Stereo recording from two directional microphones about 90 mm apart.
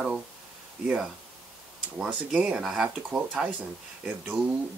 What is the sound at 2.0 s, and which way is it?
Speech, 10° right (ahead or behind).